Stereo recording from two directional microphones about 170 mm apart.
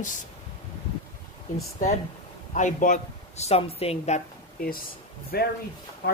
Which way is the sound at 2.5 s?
45° left (ahead or behind).